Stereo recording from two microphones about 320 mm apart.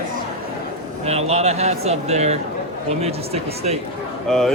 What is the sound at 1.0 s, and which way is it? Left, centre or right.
Speech, centre.